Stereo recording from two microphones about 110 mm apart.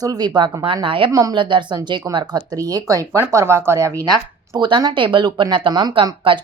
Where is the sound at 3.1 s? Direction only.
20° right (ahead or behind).